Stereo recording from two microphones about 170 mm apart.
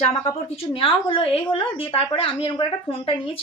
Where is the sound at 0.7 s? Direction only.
30° left (ahead or behind).